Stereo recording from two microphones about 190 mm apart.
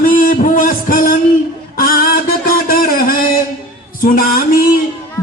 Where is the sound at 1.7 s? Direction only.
50° left (ahead or behind).